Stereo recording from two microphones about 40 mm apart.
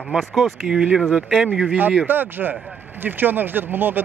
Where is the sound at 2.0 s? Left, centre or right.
Right.